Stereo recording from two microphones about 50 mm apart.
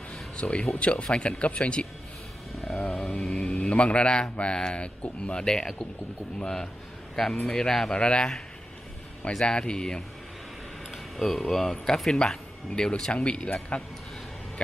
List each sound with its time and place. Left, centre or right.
0.1 s a sound: centre
0.7 s a man's voice: left
2.5 s a sound: centre
3.0 s mantra: centre
3.4 s a man's voice: left
10.9 s a man's voice: centre; by 13.8 s left